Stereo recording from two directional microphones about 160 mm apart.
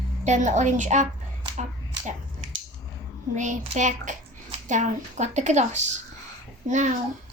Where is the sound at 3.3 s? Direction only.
50° right (ahead or behind).